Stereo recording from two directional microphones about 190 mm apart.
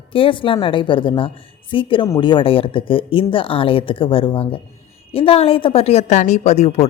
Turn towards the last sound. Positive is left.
turn(degrees=35)  # may be behind; listen again after turning